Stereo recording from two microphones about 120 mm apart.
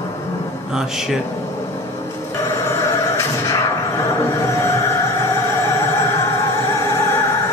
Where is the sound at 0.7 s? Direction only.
5° right (ahead or behind).